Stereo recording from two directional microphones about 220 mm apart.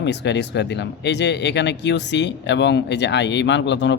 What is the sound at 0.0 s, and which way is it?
Speech, 50° left (ahead or behind).